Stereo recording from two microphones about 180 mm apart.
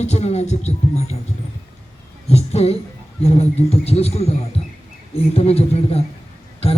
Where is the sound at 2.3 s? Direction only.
35° left (ahead or behind).